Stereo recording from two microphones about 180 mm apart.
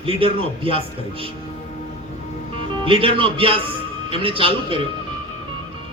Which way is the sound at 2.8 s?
30° right (ahead or behind).